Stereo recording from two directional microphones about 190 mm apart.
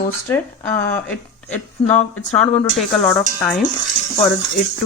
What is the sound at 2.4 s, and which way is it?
Speech, 5° left (ahead or behind).